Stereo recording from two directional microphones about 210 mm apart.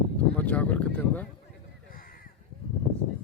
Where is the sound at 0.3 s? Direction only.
5° left (ahead or behind).